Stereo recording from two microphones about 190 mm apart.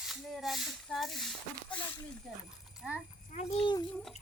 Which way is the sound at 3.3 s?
30° left (ahead or behind).